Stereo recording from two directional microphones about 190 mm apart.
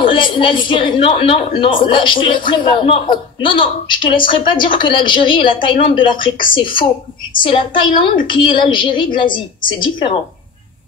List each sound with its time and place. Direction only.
0.0 s a man's voice: 25° left (ahead or behind)